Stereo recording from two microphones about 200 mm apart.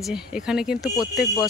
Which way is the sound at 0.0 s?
5° right (ahead or behind).